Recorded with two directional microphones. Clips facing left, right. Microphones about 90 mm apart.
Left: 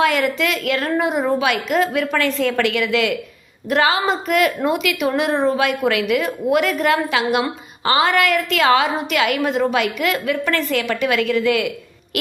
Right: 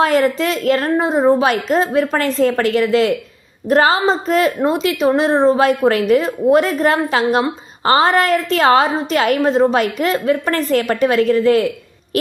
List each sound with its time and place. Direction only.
0.0 s a woman's voice: 35° right (ahead or behind)